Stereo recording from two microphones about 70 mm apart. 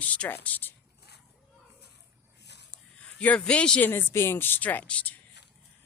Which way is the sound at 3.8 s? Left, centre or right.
Left.